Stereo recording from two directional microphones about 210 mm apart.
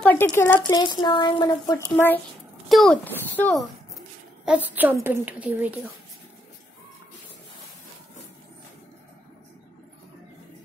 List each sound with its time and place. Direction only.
0.0 s speech: 10° left (ahead or behind)
0.7 s a child's voice: 20° left (ahead or behind)
4.5 s a woman's voice: 10° right (ahead or behind)